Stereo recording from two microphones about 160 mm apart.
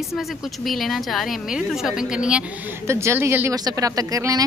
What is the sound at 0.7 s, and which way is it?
A woman's voice, centre (ahead or behind).